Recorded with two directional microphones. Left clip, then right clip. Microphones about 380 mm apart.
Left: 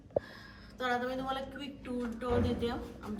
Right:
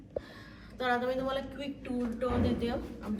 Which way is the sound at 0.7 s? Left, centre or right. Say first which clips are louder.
Right 3 dB; centre.